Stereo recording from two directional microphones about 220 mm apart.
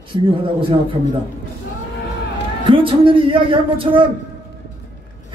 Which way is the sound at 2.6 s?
25° right (ahead or behind).